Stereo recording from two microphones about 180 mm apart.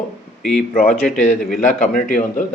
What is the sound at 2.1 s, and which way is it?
Speech, 45° left (ahead or behind).